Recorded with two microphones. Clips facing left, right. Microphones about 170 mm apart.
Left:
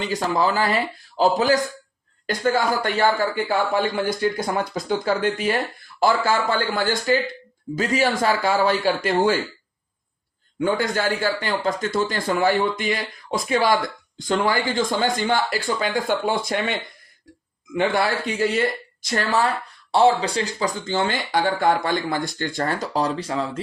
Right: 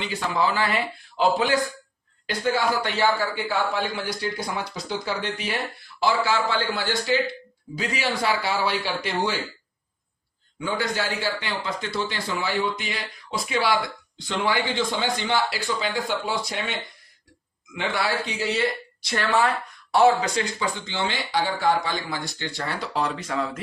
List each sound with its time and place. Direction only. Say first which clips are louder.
0.0 s speech: left 3 dB; 40° left (ahead or behind)
10.6 s speech: left 5 dB; 50° left (ahead or behind)
17.7 s speech: left 5 dB; 50° left (ahead or behind); by 23.5 s 30° left (ahead or behind)